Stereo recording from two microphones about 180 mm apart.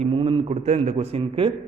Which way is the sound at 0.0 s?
30° right (ahead or behind).